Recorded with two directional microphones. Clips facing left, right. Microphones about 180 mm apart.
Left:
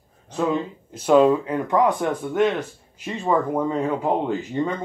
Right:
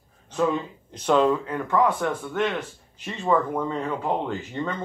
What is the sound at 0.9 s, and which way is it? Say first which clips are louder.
Speech: left 5 dB; 10° left (ahead or behind).